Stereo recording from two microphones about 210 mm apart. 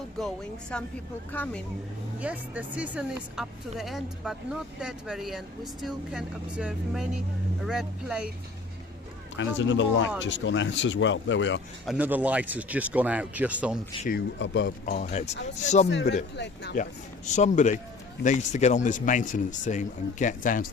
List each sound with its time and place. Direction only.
0.2 s speech: 5° left (ahead or behind)
2.1 s speech: 5° right (ahead or behind)
9.3 s speech: 60° left (ahead or behind)
11.9 s speech: 10° right (ahead or behind)
14.3 s speech: 60° left (ahead or behind)
14.9 s speech: 35° left (ahead or behind)
15.9 s speech: 60° left (ahead or behind)
17.2 s speech: 35° left (ahead or behind)